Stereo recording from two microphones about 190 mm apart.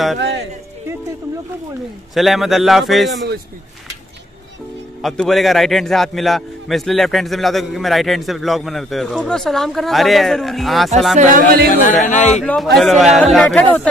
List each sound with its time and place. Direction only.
2.1 s a man's voice: centre (ahead or behind)
5.0 s a man's voice: centre (ahead or behind)
11.1 s speech: 45° right (ahead or behind)
11.8 s speech: 40° left (ahead or behind)
12.4 s a man's voice: 5° left (ahead or behind)